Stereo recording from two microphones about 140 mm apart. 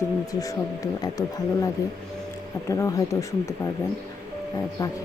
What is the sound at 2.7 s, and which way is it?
Speech, 25° left (ahead or behind).